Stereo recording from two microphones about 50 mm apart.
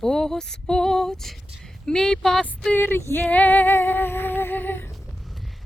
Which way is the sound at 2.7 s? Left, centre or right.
Left.